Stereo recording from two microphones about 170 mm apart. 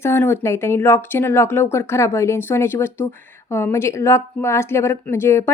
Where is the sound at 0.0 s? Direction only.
15° left (ahead or behind).